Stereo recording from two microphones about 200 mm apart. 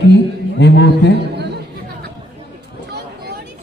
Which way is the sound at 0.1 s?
60° left (ahead or behind).